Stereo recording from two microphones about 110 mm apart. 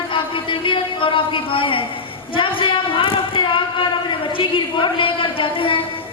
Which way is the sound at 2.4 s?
50° left (ahead or behind).